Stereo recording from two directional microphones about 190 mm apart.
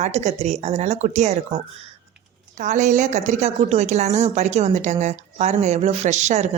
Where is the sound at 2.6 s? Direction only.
40° right (ahead or behind).